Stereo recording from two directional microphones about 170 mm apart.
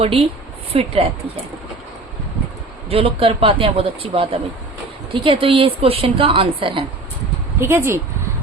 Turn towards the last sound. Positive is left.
turn(degrees=-15)  # may be behind; listen again after turning